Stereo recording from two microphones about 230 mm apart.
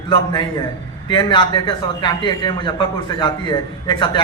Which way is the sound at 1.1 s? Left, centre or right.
Left.